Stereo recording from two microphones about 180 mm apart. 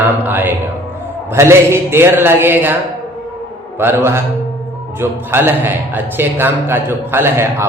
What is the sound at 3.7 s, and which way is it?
A man's voice, 10° right (ahead or behind).